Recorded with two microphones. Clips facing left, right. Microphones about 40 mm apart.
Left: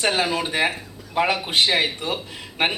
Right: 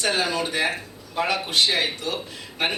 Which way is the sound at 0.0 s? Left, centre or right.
Left.